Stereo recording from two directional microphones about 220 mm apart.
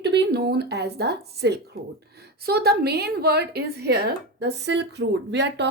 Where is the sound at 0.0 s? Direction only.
50° right (ahead or behind).